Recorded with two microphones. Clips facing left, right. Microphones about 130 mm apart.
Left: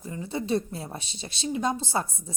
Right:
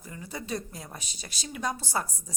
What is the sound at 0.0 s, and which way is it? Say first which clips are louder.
Speech: left 7 dB; 25° left (ahead or behind).